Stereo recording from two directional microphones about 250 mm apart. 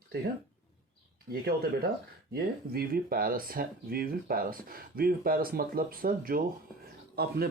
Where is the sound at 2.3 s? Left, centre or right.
Right.